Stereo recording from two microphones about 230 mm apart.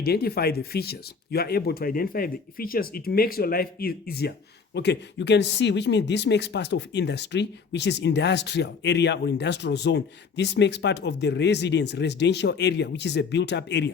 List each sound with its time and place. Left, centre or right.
0.0 s speech: left